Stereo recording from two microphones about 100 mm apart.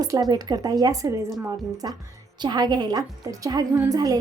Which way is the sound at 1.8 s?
50° right (ahead or behind).